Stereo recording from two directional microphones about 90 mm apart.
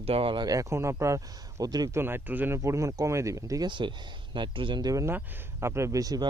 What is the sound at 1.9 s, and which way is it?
Speech, 25° right (ahead or behind).